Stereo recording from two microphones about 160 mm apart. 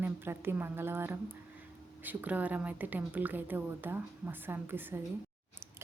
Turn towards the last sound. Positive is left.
turn(degrees=-15)  # may be behind; listen again after turning